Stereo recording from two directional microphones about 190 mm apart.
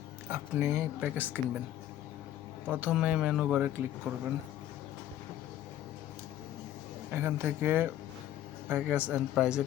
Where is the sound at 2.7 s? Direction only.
5° right (ahead or behind).